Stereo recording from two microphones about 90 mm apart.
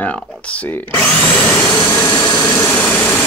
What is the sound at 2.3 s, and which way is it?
Vehicle, 25° left (ahead or behind).